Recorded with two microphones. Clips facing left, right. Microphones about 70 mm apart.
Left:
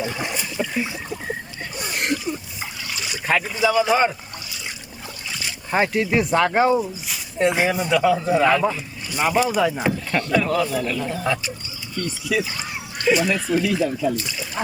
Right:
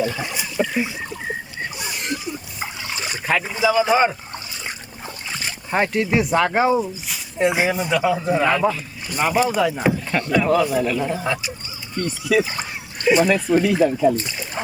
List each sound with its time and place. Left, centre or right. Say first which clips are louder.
0.3 s a sound: right 3 dB; centre
2.9 s boat: right 1 dB; right
3.6 s speech: right 2 dB; centre
5.7 s speech: even; centre
9.8 s speech: right 2 dB; centre
11.9 s speech: right 4 dB; right